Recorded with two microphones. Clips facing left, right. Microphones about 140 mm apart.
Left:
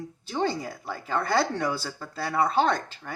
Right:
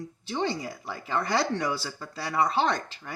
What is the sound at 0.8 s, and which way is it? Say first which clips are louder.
Speech: left 1 dB; 45° left (ahead or behind).